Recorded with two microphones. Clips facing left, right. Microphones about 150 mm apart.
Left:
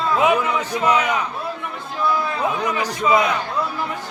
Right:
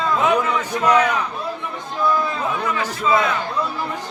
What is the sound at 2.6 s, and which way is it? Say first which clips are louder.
Speech: even; 15° left (ahead or behind).